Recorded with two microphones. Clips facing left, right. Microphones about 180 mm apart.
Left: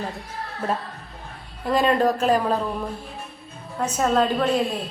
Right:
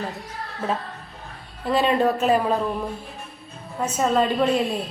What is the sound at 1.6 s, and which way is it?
Speech, 5° right (ahead or behind).